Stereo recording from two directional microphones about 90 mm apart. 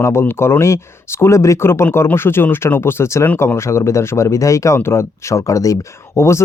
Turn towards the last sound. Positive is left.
turn(degrees=30)  # may be behind; listen again after turning